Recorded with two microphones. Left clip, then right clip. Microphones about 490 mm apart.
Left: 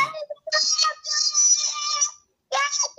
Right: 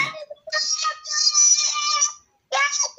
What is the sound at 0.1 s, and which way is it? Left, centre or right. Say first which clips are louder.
Music: left 2 dB; left.